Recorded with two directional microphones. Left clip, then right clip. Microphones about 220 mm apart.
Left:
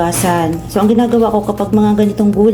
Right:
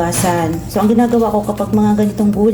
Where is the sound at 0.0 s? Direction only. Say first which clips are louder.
Left 2 dB; 10° left (ahead or behind).